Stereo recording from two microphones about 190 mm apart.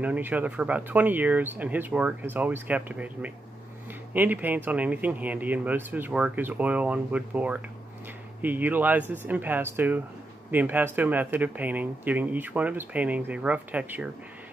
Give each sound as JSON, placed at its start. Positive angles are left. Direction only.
{"t": 0.0, "sound": "speech", "side_deg": -10}